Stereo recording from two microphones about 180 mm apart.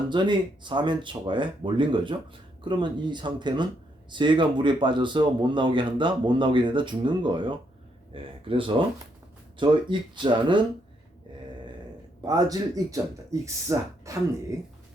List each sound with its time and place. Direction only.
0.1 s speech: 25° right (ahead or behind)
12.2 s speech: 20° right (ahead or behind)